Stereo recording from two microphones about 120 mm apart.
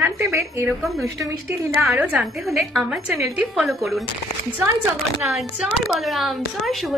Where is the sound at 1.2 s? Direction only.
25° right (ahead or behind).